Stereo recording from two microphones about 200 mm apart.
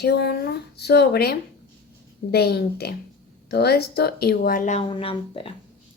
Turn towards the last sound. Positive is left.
turn(degrees=25)  # may be behind; listen again after turning